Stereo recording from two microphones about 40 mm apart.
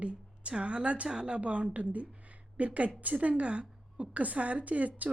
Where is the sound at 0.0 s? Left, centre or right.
Right.